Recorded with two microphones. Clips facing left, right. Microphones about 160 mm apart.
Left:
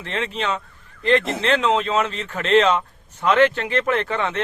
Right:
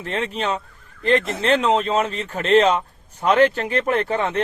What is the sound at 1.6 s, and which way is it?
Speech, 40° right (ahead or behind).